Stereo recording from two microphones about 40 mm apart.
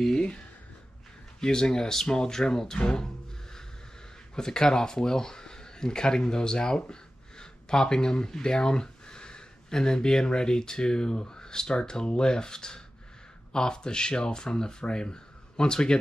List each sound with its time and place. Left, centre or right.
1.4 s speech: centre
4.4 s speech: centre